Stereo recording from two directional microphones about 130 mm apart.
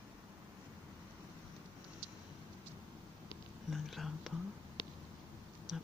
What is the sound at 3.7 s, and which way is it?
Whispering, centre (ahead or behind).